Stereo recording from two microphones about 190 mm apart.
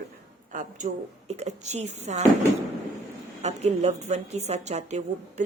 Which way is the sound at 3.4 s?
35° right (ahead or behind).